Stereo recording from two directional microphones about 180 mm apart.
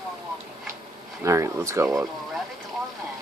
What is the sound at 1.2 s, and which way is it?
Speech, 15° right (ahead or behind).